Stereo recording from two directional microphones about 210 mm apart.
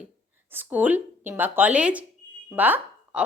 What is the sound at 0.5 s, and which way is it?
A woman's voice, 10° right (ahead or behind).